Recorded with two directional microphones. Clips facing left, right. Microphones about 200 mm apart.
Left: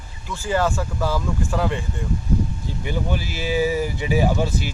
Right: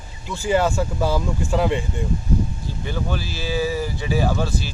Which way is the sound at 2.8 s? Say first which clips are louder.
Left 1 dB; 15° left (ahead or behind).